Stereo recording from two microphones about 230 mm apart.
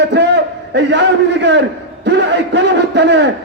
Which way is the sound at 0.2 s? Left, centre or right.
Right.